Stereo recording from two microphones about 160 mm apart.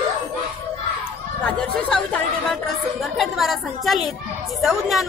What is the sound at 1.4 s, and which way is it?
A woman's voice, 10° left (ahead or behind).